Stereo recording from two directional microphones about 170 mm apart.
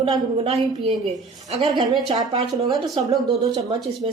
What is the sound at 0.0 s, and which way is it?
Speech, 35° right (ahead or behind).